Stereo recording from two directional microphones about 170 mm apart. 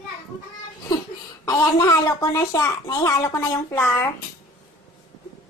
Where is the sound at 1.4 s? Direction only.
20° left (ahead or behind).